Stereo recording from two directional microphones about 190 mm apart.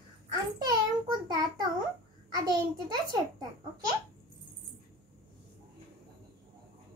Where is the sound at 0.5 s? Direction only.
20° right (ahead or behind).